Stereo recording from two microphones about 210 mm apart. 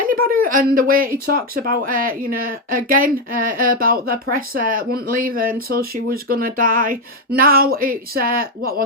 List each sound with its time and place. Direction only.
0.0 s speech: 40° right (ahead or behind)